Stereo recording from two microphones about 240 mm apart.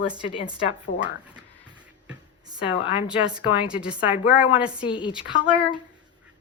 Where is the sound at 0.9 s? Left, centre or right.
Left.